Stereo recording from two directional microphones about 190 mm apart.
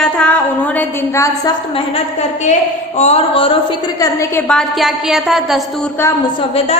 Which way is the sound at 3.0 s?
35° left (ahead or behind).